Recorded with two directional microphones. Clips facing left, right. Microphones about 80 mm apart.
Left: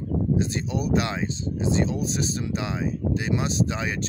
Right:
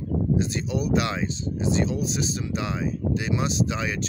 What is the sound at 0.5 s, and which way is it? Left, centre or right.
Speech, left.